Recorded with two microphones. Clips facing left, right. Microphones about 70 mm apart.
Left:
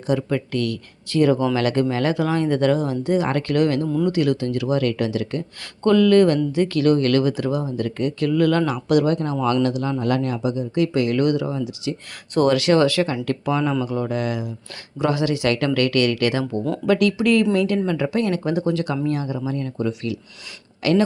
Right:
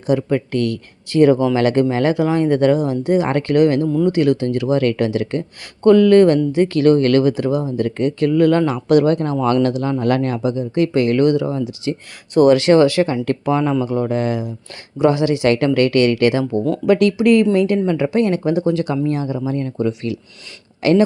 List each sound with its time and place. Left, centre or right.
0.1 s speech: right
5.8 s speech: right
10.0 s speech: right
12.5 s speech: right
16.8 s speech: centre
17.2 s speech: right